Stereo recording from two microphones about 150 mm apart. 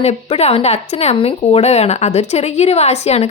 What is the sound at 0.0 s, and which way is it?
Speech, 45° left (ahead or behind).